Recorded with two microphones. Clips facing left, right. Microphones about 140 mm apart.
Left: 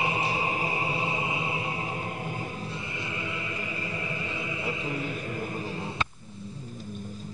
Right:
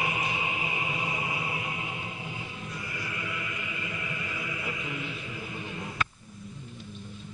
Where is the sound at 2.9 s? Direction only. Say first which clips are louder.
Left 1 dB; 25° left (ahead or behind); by 5.6 s 40° left (ahead or behind).